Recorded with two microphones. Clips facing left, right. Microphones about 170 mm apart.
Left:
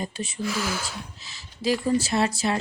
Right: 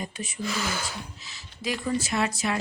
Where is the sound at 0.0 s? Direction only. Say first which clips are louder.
Left 3 dB; 30° left (ahead or behind).